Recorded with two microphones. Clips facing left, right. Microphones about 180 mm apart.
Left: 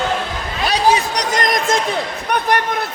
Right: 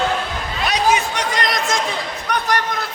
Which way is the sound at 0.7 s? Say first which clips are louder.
Left 2 dB; 35° left (ahead or behind).